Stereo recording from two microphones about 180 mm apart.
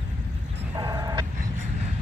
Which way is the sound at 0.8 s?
20° right (ahead or behind).